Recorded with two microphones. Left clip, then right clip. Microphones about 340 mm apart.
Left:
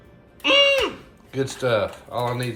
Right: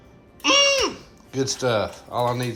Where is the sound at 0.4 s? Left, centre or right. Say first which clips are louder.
Left 1 dB; centre.